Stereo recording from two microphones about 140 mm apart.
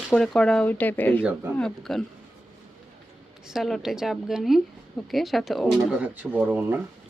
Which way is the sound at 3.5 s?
Centre (ahead or behind).